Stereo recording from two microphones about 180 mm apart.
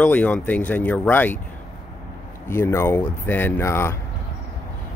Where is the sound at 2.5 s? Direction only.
15° left (ahead or behind).